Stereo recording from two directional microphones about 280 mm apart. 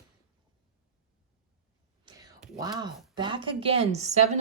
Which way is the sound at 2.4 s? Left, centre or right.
Centre.